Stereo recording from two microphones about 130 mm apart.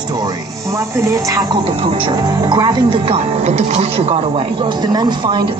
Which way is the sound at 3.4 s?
55° right (ahead or behind).